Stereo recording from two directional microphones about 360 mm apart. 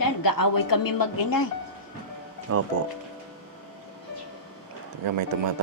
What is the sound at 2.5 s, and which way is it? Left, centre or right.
Speech, right.